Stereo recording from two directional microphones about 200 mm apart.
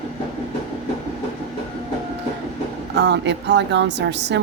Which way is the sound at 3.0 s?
60° right (ahead or behind).